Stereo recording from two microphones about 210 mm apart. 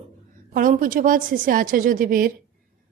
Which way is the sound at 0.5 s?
40° right (ahead or behind).